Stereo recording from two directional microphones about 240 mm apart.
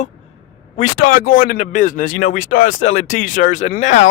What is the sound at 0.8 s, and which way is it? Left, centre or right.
Speech, left.